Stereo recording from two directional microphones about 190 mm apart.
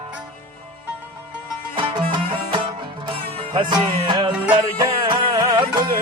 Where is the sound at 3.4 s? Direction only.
25° right (ahead or behind).